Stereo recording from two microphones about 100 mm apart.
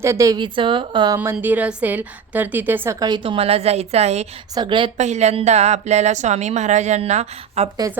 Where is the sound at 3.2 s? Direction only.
70° right (ahead or behind); by 4.3 s 90° right.